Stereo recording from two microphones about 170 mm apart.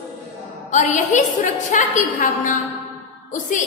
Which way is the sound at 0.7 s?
45° left (ahead or behind).